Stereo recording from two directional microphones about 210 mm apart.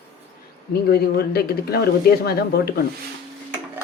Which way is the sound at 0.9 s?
50° left (ahead or behind).